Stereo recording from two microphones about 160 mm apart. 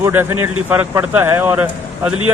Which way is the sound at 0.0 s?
15° right (ahead or behind).